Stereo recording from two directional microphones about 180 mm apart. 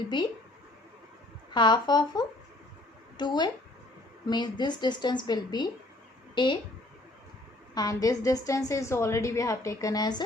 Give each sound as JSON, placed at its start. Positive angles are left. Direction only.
{"t": 0.1, "sound": "a woman's voice", "side_deg": 25}
{"t": 1.5, "sound": "a woman's voice", "side_deg": 25}
{"t": 7.7, "sound": "a woman's voice", "side_deg": 20}